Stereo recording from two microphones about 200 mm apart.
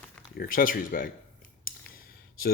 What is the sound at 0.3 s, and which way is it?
Speech, 45° left (ahead or behind).